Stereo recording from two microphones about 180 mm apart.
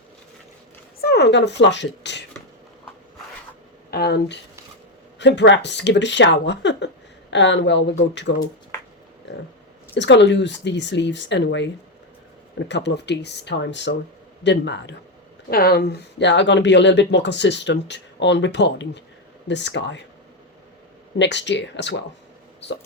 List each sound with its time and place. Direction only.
1.0 s speech: 70° left (ahead or behind)
3.9 s speech: 65° left (ahead or behind)
5.2 s speech: 80° left
9.9 s speech: 80° left
15.4 s speech: 60° left (ahead or behind); by 20.0 s 75° left (ahead or behind)
21.2 s speech: 80° left